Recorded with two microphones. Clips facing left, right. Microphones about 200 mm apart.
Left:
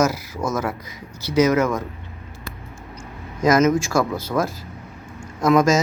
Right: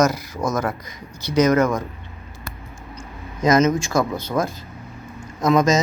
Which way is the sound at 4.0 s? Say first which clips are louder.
Even; 5° left (ahead or behind).